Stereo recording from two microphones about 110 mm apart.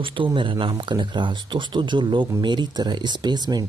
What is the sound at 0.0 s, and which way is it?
Speech, 50° right (ahead or behind).